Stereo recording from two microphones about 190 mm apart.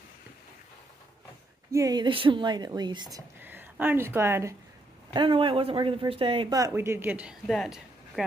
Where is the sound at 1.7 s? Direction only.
20° right (ahead or behind).